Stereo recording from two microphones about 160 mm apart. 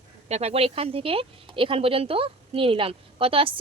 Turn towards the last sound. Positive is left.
turn(degrees=-35)  # may be behind; listen again after turning